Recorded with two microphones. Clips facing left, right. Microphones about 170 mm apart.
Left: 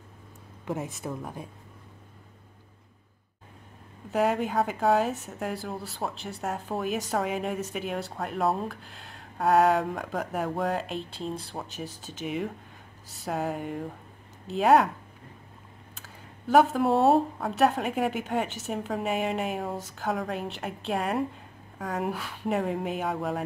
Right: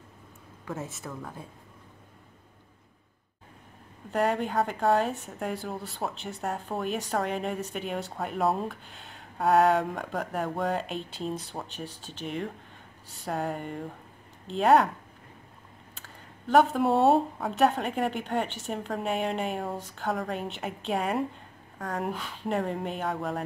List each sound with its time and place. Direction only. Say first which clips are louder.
0.7 s speech: left 4 dB; 15° left (ahead or behind)
4.1 s speech: left 1 dB; centre (ahead or behind)
16.0 s speech: left 1 dB; 5° left (ahead or behind)